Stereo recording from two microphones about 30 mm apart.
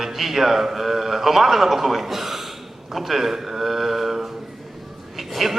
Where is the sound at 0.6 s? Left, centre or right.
Centre.